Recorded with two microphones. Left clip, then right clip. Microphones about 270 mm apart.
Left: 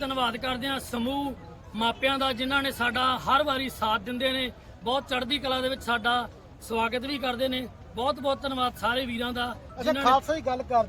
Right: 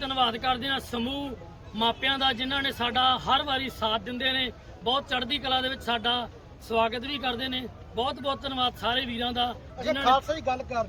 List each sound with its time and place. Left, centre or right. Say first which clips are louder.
0.0 s a man's voice: right 2 dB; centre
9.7 s speech: left 1 dB; left